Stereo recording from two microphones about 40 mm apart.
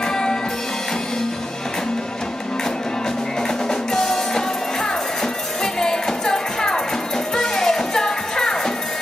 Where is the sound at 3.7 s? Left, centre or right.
Centre.